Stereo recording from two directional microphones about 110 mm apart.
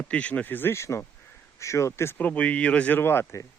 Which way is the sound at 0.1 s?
10° left (ahead or behind).